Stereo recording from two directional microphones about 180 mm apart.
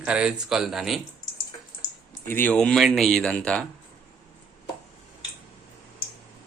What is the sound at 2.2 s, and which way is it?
Speech, 10° left (ahead or behind).